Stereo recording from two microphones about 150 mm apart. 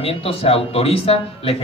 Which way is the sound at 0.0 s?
40° left (ahead or behind).